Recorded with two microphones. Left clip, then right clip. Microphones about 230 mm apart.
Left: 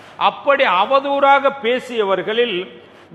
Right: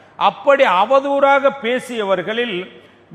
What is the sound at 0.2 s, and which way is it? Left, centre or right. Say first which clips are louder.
A man's voice: right 2 dB; right.